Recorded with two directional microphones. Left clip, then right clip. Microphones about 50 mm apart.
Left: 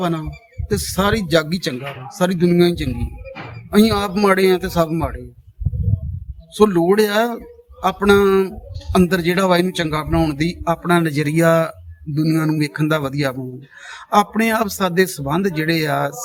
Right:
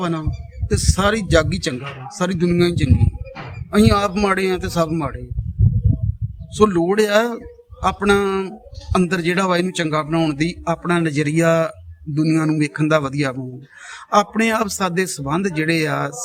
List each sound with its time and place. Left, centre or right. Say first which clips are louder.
0.0 s speech: left 1 dB; centre
6.5 s speech: left 2 dB; right
11.1 s speech: left 1 dB; centre